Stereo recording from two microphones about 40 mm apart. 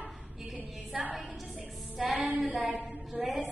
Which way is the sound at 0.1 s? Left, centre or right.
Centre.